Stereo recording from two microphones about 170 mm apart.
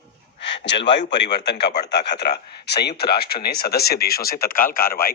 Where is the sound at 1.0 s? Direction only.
90° left.